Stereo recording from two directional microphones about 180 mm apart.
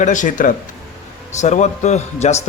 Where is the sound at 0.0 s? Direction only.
45° left (ahead or behind).